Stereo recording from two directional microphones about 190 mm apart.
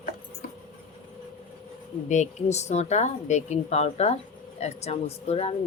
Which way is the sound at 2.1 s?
35° left (ahead or behind).